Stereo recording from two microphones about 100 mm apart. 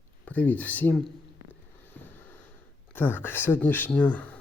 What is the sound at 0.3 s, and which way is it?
Speech, 15° left (ahead or behind).